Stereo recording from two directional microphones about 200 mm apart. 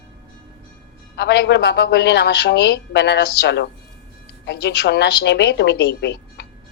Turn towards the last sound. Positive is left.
turn(degrees=55)  # may be behind; listen again after turning